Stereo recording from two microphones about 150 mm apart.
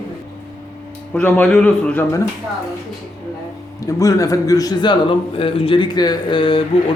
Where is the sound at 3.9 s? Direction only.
20° left (ahead or behind).